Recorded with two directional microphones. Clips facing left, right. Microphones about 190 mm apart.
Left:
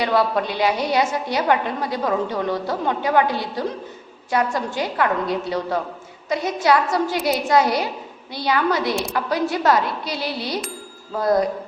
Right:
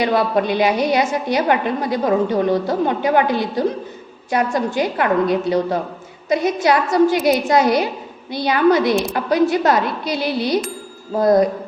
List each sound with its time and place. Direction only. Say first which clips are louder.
0.0 s a woman's voice: right 3 dB; 15° right (ahead or behind)